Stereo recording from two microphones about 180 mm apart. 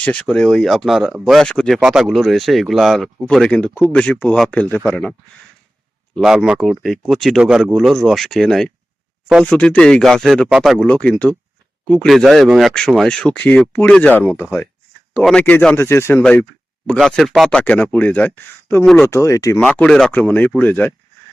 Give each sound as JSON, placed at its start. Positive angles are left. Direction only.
{"t": 0.0, "sound": "speech", "side_deg": 5}
{"t": 6.1, "sound": "speech", "side_deg": -5}
{"t": 19.5, "sound": "speech", "side_deg": 5}